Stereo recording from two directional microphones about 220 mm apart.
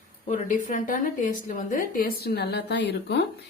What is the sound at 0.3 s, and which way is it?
Speech, 35° left (ahead or behind).